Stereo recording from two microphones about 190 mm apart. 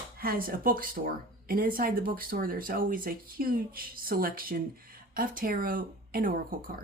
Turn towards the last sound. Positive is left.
turn(degrees=-50)  # may be behind; listen again after turning